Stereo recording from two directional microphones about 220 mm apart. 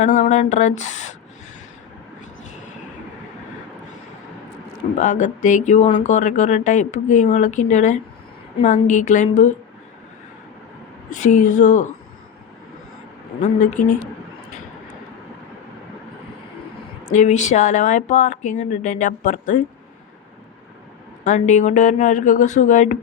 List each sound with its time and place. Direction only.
0.0 s speech: 35° left (ahead or behind)
2.4 s vehicle: 35° left (ahead or behind)
4.9 s speech: 35° left (ahead or behind)
11.1 s speech: 35° left (ahead or behind)
13.4 s speech: 35° left (ahead or behind)
17.2 s speech: 30° left (ahead or behind)
21.2 s speech: 35° left (ahead or behind)